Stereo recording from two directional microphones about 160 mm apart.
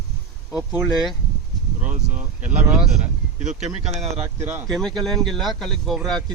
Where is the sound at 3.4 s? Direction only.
50° right (ahead or behind).